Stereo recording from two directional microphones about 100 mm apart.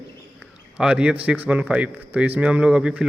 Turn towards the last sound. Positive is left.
turn(degrees=-10)  # may be behind; listen again after turning